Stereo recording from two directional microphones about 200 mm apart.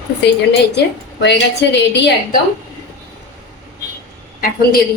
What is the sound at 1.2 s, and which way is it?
Speech, 60° left (ahead or behind).